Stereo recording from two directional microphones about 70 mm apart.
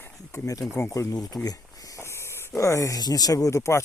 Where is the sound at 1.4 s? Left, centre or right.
Left.